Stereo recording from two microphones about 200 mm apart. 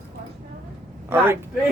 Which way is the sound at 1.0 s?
10° right (ahead or behind).